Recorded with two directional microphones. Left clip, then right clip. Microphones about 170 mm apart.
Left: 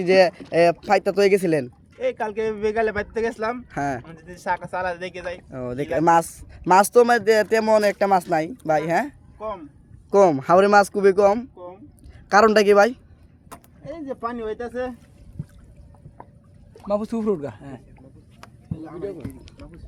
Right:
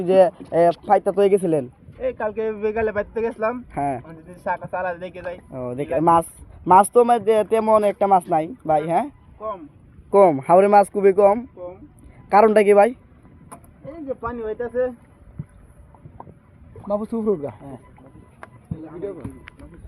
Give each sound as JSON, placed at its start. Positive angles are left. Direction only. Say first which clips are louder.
{"t": 0.0, "sound": "speech", "louder": "right 1 dB", "side_deg": 35}
{"t": 14.7, "sound": "speech", "louder": "right 6 dB", "side_deg": 10}
{"t": 17.0, "sound": "speech", "louder": "right 1 dB", "side_deg": -25}
{"t": 17.2, "sound": "speech", "louder": "right 2 dB", "side_deg": 0}